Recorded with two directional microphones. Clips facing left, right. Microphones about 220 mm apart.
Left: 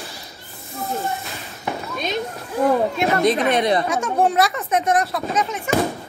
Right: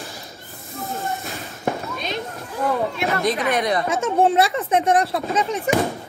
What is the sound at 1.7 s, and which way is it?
Fireworks, 50° right (ahead or behind).